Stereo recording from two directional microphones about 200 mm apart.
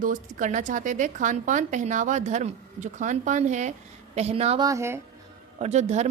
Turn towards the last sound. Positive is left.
turn(degrees=-35)  # may be behind; listen again after turning